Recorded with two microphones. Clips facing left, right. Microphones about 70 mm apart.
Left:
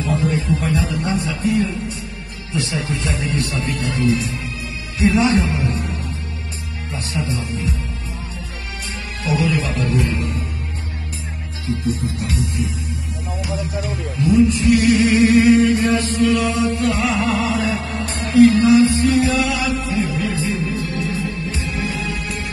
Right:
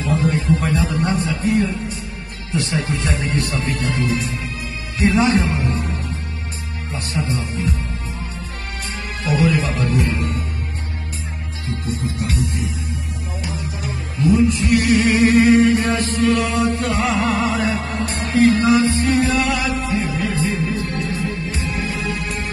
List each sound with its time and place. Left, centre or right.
0.0 s a man's voice: right
1.3 s a man's voice: right
7.2 s a man's voice: right
9.2 s a man's voice: right
12.3 s music: right
14.1 s chant: right
21.5 s music: right